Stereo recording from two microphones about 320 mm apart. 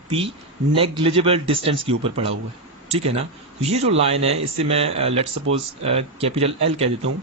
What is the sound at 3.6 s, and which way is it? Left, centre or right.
Speech, centre.